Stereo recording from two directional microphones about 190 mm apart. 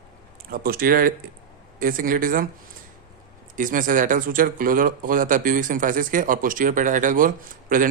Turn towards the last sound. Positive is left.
turn(degrees=-45)  # may be behind; listen again after turning